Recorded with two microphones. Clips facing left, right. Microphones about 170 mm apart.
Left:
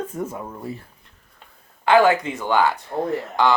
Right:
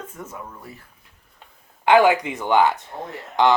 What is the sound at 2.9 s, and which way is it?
Speech, 40° left (ahead or behind).